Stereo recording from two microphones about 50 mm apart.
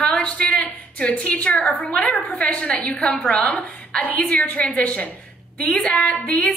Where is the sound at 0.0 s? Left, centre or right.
Left.